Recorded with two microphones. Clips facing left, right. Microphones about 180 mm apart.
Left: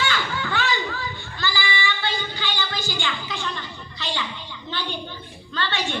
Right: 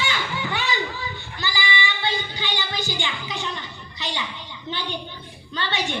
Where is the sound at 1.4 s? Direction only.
20° right (ahead or behind).